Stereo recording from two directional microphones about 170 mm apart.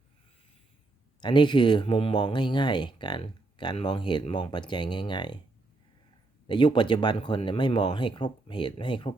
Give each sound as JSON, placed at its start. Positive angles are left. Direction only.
{"t": 1.2, "sound": "speech", "side_deg": 25}
{"t": 6.5, "sound": "speech", "side_deg": 30}